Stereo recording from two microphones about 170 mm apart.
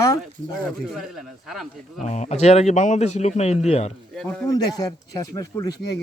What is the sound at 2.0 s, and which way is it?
A man's voice, 45° left (ahead or behind).